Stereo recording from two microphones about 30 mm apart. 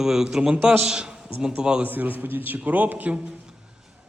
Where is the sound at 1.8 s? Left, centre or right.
Right.